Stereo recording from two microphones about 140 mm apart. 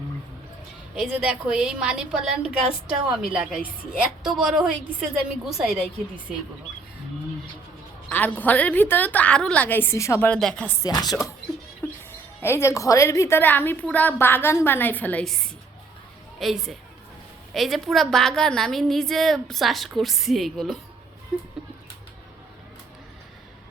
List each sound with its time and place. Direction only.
0.9 s a woman's voice: 5° right (ahead or behind)
8.1 s speech: 10° left (ahead or behind)
10.8 s speech: 25° left (ahead or behind); by 15.4 s 5° left (ahead or behind)
16.4 s a woman's voice: centre (ahead or behind)